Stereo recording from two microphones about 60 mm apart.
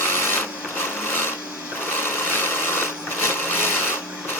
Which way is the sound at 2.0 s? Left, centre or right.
Left.